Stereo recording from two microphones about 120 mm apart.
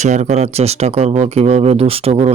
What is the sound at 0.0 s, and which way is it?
Speech, 75° right (ahead or behind).